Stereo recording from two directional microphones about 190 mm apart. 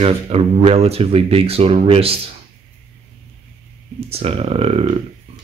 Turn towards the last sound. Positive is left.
turn(degrees=-30)  # may be behind; listen again after turning